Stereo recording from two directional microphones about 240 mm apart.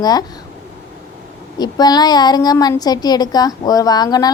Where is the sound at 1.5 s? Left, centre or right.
Centre.